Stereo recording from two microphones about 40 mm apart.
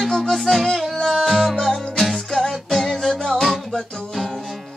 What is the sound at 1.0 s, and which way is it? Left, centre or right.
Music, centre.